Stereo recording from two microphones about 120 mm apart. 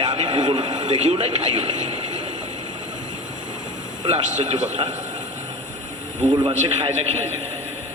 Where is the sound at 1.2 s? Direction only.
45° right (ahead or behind).